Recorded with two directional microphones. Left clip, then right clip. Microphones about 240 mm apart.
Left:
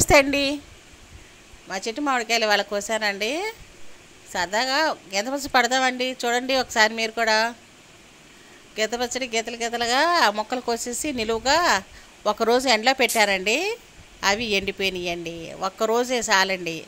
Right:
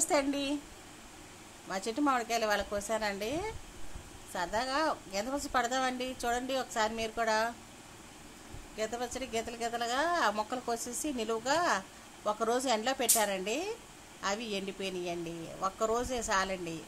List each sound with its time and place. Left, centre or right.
0.1 s a woman's voice: centre
1.7 s a woman's voice: centre
8.7 s a woman's voice: centre